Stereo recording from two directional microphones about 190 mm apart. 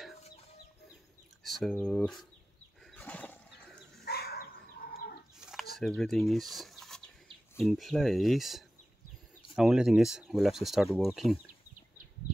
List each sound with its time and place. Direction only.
1.4 s speech: centre (ahead or behind)
2.8 s wild animals: 5° left (ahead or behind)
4.0 s a sound: 55° left (ahead or behind)
4.8 s livestock: 50° left (ahead or behind)
5.4 s chicken: centre (ahead or behind)
5.8 s speech: centre (ahead or behind)